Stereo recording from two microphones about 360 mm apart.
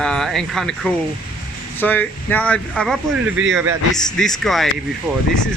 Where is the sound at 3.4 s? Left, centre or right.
Right.